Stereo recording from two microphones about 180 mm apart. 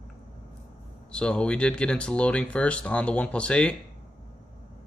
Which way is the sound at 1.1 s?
5° left (ahead or behind).